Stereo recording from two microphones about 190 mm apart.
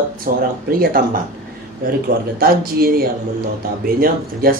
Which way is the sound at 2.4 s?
50° right (ahead or behind).